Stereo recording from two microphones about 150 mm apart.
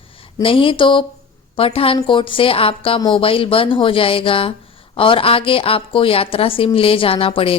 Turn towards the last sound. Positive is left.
turn(degrees=35)  # may be behind; listen again after turning